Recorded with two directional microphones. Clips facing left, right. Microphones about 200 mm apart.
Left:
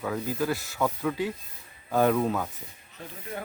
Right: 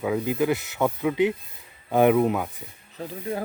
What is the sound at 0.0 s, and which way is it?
A man's voice, 15° right (ahead or behind).